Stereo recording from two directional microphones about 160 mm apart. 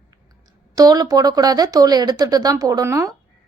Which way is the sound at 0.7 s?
25° right (ahead or behind).